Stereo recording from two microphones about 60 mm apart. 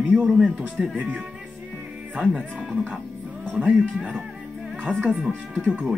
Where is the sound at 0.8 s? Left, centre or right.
Right.